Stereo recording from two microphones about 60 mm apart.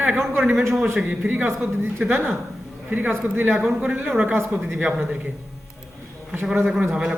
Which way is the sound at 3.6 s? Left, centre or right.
Centre.